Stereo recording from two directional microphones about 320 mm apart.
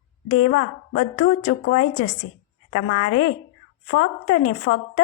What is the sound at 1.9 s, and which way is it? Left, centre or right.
Speech, left.